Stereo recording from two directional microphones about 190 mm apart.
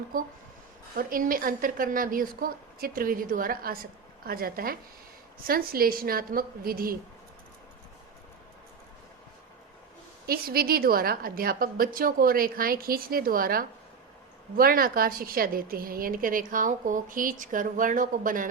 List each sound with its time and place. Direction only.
0.9 s a woman's voice: 50° right (ahead or behind)
10.2 s a woman's voice: 50° right (ahead or behind)